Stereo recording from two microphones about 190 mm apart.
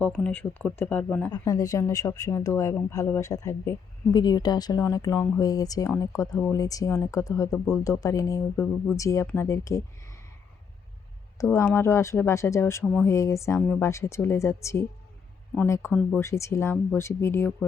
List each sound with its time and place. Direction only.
0.0 s speech: 5° left (ahead or behind)
11.5 s speech: 15° left (ahead or behind)